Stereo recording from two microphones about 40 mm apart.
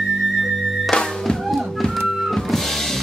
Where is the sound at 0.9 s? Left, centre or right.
Centre.